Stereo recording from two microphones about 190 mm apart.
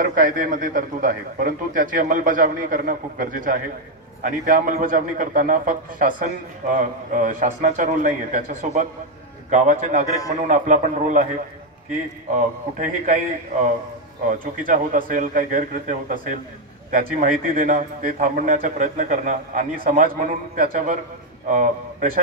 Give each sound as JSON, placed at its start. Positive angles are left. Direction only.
{"t": 0.0, "sound": "a man's voice", "side_deg": -45}
{"t": 12.4, "sound": "a man's voice", "side_deg": -40}